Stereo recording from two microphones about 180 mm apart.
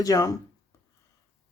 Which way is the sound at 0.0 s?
20° left (ahead or behind).